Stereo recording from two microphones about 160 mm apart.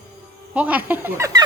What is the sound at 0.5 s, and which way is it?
Speech, 10° right (ahead or behind).